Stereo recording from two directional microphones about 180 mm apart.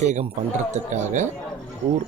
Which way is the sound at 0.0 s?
40° right (ahead or behind).